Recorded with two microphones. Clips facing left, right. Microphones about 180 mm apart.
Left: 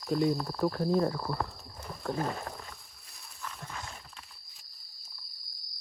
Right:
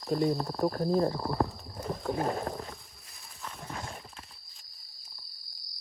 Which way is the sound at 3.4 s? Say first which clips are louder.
Right 2 dB; 30° right (ahead or behind).